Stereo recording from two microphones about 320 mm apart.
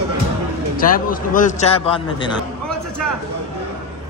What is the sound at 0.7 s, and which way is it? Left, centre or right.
A man's voice, left.